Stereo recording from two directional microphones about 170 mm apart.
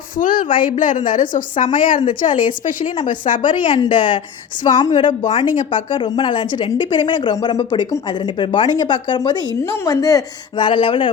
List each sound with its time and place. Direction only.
0.2 s a woman's voice: 50° left (ahead or behind)
3.4 s a woman's voice: 30° left (ahead or behind)
5.4 s a woman's voice: 30° left (ahead or behind)